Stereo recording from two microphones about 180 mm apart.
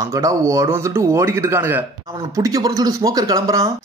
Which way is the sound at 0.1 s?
15° right (ahead or behind).